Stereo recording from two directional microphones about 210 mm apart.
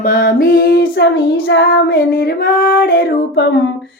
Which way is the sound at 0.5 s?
45° left (ahead or behind).